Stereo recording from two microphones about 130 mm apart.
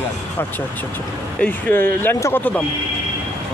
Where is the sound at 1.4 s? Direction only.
15° left (ahead or behind).